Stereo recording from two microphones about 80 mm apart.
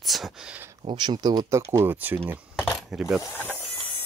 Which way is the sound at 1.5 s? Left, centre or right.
Right.